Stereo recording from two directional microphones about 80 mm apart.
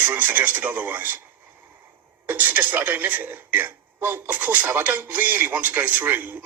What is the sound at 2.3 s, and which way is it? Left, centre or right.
Speech, right.